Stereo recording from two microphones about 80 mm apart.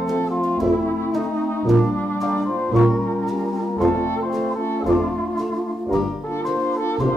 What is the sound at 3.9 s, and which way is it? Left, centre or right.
Music, left.